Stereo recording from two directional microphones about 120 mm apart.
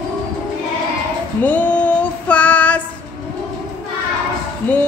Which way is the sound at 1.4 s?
15° left (ahead or behind).